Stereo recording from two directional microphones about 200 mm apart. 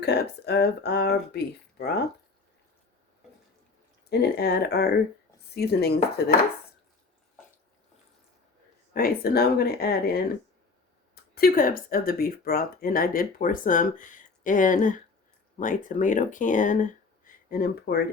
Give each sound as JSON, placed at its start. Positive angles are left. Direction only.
{"t": 0.0, "sound": "speech", "side_deg": 55}
{"t": 4.1, "sound": "speech", "side_deg": 55}
{"t": 8.9, "sound": "speech", "side_deg": 50}